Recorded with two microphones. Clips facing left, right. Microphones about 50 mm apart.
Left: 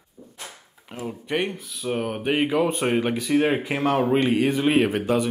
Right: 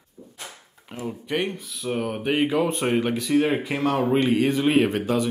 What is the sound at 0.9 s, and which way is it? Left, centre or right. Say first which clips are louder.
Speech: even; centre.